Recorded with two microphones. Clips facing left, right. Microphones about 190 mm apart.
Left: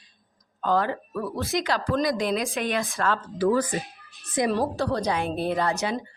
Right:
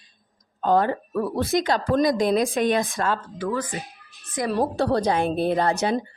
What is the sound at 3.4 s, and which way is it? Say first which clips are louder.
Speech: left 7 dB; 35° left (ahead or behind).